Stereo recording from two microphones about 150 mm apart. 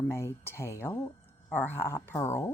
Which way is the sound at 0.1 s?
15° left (ahead or behind).